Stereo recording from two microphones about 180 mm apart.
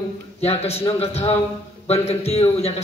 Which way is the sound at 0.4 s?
35° left (ahead or behind).